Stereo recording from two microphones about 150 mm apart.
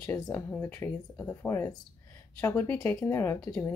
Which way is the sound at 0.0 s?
15° left (ahead or behind).